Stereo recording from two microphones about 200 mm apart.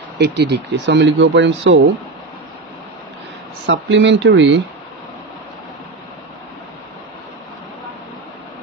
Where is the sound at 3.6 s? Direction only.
70° right (ahead or behind).